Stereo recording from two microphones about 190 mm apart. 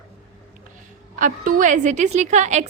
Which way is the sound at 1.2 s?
45° right (ahead or behind).